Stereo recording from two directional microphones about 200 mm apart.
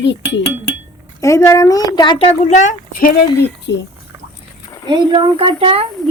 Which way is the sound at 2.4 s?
35° left (ahead or behind).